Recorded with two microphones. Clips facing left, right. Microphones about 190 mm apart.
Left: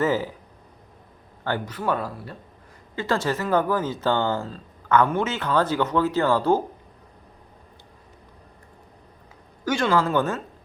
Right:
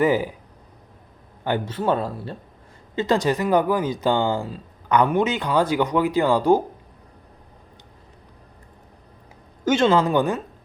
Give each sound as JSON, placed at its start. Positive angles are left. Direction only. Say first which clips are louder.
{"t": 0.0, "sound": "speech", "louder": "right 3 dB", "side_deg": -15}
{"t": 1.5, "sound": "speech", "louder": "right 4 dB", "side_deg": -25}
{"t": 9.6, "sound": "speech", "louder": "right 4 dB", "side_deg": -25}